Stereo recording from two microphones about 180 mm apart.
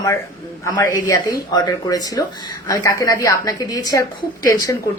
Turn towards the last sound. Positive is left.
turn(degrees=20)  # may be behind; listen again after turning